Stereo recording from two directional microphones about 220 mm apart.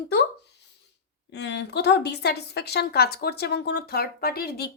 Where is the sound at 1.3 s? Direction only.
50° left (ahead or behind).